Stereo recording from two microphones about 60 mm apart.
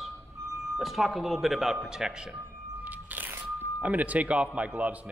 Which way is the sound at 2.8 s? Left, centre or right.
Right.